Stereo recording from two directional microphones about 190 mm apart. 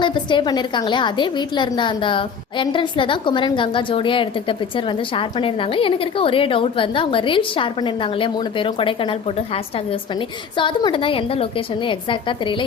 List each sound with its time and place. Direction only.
0.0 s a woman's voice: 25° left (ahead or behind)
10.6 s a woman's voice: 25° left (ahead or behind)